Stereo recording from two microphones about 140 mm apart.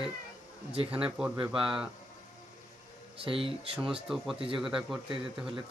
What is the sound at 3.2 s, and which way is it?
Speech, 40° right (ahead or behind).